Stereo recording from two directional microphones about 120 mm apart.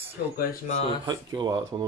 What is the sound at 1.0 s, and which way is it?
Speech, 35° right (ahead or behind).